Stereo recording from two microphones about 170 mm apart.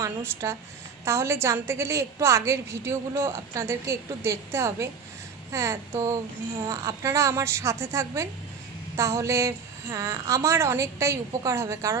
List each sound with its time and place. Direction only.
0.0 s a woman's voice: 15° right (ahead or behind)